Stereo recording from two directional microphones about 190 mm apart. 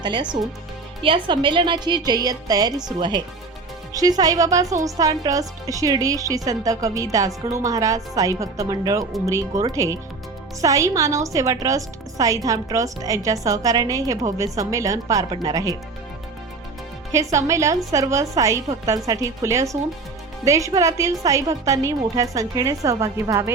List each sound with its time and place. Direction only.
0.0 s a woman's voice: 25° right (ahead or behind)
17.1 s a woman's voice: 15° right (ahead or behind)